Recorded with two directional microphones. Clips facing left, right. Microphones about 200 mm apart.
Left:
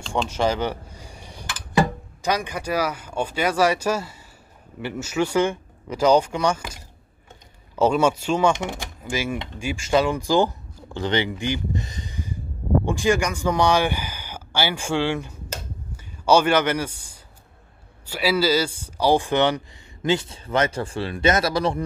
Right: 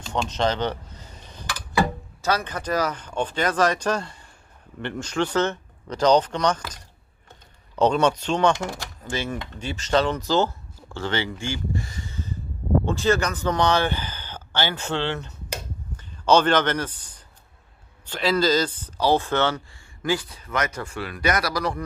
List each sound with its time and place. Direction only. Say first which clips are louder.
0.3 s cutlery: even; 10° left (ahead or behind)
2.2 s a man's voice: even; 15° left (ahead or behind)